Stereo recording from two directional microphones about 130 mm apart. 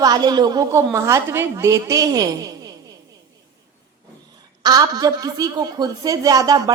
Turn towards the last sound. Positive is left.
turn(degrees=-30)  # may be behind; listen again after turning